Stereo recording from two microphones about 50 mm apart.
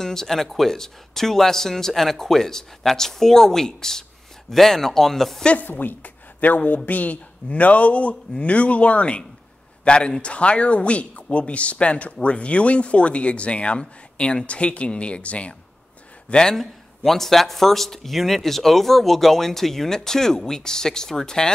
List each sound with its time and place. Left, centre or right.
0.0 s a man's voice: centre
5.6 s a woman's voice: left; by 21.5 s centre